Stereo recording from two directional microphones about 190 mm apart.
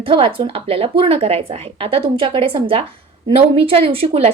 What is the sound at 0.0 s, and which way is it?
A woman's voice, 25° right (ahead or behind).